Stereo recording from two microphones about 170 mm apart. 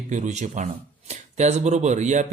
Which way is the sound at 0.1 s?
45° right (ahead or behind).